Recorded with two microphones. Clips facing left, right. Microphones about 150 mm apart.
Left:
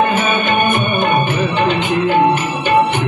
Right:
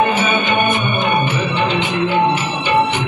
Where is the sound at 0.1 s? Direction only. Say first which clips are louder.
Left 1 dB; 50° left (ahead or behind).